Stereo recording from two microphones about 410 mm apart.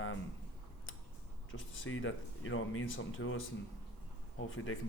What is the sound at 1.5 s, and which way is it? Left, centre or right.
Speech, left.